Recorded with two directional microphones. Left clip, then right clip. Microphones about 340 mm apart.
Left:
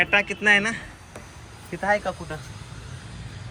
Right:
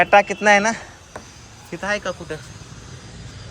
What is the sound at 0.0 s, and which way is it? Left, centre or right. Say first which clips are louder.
Speech: right 6 dB; right.